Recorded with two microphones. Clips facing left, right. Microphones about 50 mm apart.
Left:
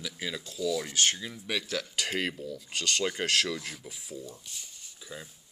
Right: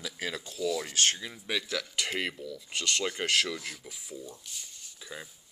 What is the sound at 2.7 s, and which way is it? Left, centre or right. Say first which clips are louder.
Speech: left 1 dB; right.